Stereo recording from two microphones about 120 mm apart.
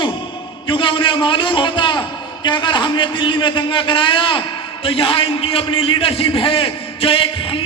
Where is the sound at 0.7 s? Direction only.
45° left (ahead or behind).